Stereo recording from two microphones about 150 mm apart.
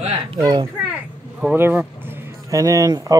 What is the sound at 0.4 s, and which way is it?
Speech, 25° right (ahead or behind).